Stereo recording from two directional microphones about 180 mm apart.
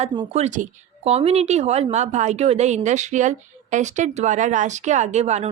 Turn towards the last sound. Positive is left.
turn(degrees=-35)  # may be behind; listen again after turning